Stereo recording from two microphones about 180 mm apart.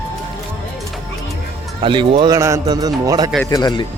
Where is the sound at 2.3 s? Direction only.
15° right (ahead or behind).